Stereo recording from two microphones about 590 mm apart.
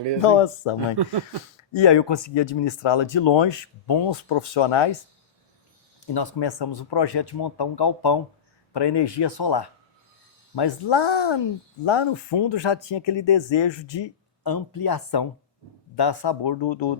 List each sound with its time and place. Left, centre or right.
0.3 s speech: left
1.7 s speech: left
6.1 s speech: left